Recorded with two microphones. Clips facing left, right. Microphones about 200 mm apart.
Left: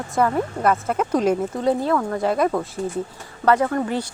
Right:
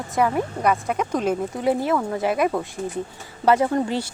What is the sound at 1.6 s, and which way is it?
Speech, 15° right (ahead or behind).